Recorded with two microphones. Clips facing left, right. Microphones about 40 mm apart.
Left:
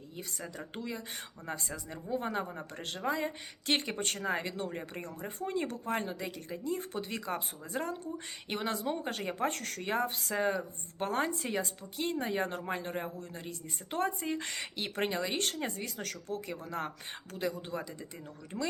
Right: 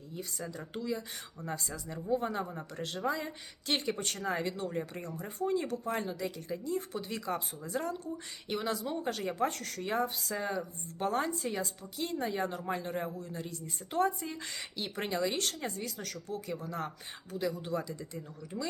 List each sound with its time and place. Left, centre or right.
0.2 s speech: left
2.5 s speech: left
3.1 s speech: left
4.7 s speech: left
5.4 s speech: left